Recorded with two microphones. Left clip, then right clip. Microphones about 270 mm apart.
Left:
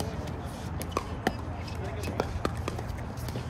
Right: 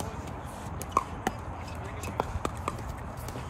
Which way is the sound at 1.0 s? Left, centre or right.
Centre.